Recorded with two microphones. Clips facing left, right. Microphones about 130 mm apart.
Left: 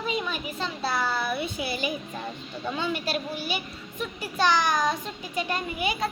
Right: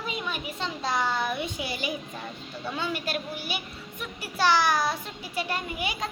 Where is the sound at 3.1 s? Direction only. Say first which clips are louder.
Left 3 dB; 55° right (ahead or behind).